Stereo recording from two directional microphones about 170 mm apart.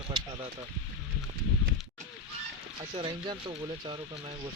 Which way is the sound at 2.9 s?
30° right (ahead or behind).